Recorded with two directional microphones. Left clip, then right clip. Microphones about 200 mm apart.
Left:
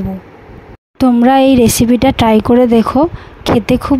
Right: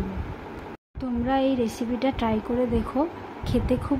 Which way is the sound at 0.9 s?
55° left (ahead or behind).